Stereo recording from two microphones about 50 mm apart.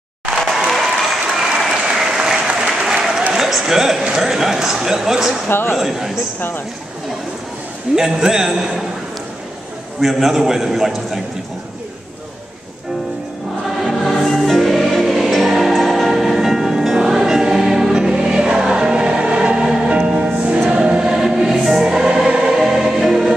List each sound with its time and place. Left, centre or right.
0.4 s applause: centre
3.3 s speech: centre
5.5 s speech: left
5.8 s speech: centre
7.9 s speech: centre
9.9 s a man's voice: centre
13.7 s choir: centre
15.7 s music: centre
16.0 s choir: centre
20.1 s music: right
20.7 s choir: centre